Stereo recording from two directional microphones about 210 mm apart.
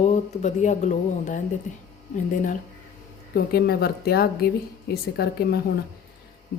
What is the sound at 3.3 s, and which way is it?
A woman's voice, 50° left (ahead or behind).